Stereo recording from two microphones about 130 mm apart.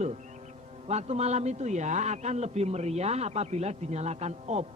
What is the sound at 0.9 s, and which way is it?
A man's voice, 55° right (ahead or behind).